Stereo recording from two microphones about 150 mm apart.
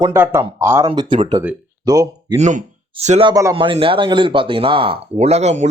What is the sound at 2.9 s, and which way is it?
Speech, 40° right (ahead or behind).